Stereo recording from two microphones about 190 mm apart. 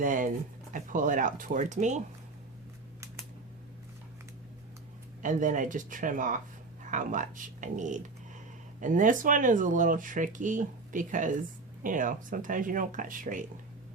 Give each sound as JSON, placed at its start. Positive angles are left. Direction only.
{"t": 0.0, "sound": "speech", "side_deg": -45}
{"t": 5.2, "sound": "speech", "side_deg": -40}